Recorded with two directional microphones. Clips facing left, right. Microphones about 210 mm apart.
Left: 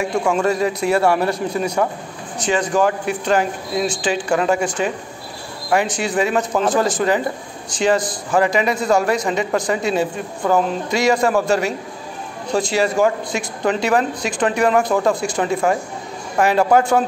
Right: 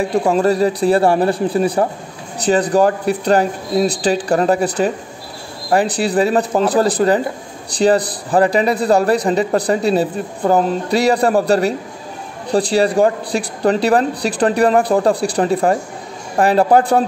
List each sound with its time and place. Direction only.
0.0 s a man's voice: 35° right (ahead or behind)